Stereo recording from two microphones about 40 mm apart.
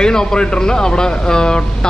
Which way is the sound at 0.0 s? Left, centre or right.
Centre.